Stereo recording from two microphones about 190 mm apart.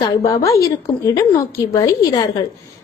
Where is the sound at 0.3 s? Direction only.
15° left (ahead or behind).